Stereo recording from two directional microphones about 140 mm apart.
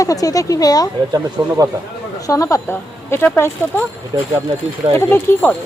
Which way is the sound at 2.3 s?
25° left (ahead or behind).